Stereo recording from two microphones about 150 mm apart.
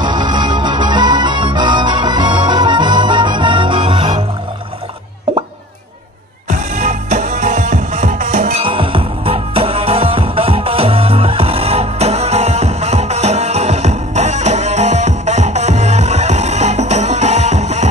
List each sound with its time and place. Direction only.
0.0 s music: 30° right (ahead or behind)
6.5 s music: 50° right (ahead or behind)
8.6 s music: 35° right (ahead or behind)